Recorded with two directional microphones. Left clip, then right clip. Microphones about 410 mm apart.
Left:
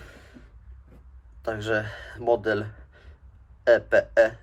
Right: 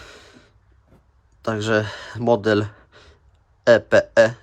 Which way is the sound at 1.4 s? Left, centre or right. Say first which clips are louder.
Right 6 dB; right.